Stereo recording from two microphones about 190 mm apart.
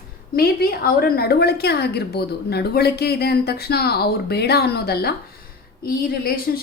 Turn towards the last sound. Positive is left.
turn(degrees=50)  # may be behind; listen again after turning